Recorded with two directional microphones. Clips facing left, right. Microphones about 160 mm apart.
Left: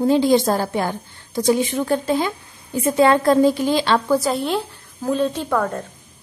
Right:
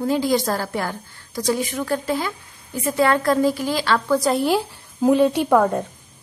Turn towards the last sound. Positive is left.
turn(degrees=-15)  # may be behind; listen again after turning